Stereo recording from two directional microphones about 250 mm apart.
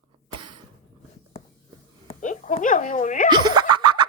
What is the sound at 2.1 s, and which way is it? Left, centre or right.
Speech, left.